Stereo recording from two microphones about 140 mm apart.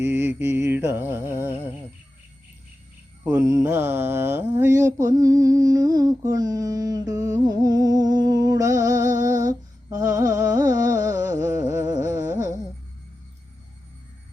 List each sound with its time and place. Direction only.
0.0 s music: 15° right (ahead or behind)
3.4 s mantra: 25° right (ahead or behind)
9.2 s humming: 25° right (ahead or behind)
10.0 s carnatic music: 20° right (ahead or behind)
10.9 s music: 20° right (ahead or behind)